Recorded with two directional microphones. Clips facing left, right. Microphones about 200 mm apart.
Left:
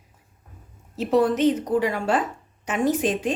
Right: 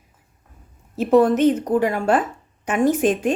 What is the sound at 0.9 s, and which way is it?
A woman's voice, 50° right (ahead or behind).